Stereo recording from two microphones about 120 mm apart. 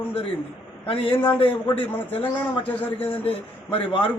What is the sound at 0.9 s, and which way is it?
A man's voice, 45° left (ahead or behind).